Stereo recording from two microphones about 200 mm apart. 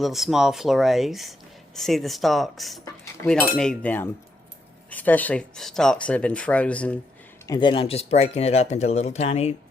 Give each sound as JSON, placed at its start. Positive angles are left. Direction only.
{"t": 0.0, "sound": "speech", "side_deg": 0}
{"t": 7.4, "sound": "speech", "side_deg": 20}